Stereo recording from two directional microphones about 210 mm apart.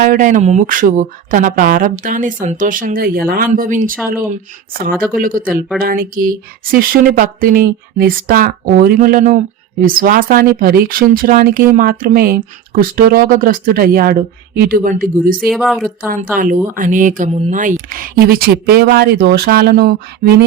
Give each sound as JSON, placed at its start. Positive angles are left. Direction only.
{"t": 0.0, "sound": "speech", "side_deg": -40}
{"t": 15.4, "sound": "speech", "side_deg": 0}
{"t": 16.3, "sound": "speech", "side_deg": -40}